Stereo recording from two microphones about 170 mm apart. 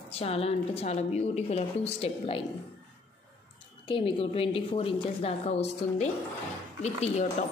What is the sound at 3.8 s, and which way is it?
A woman's voice, 30° left (ahead or behind).